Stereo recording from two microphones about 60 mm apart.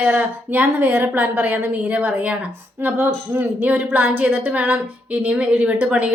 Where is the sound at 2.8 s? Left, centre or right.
Right.